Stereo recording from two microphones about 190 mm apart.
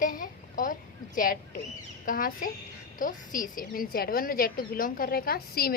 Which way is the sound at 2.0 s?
45° left (ahead or behind).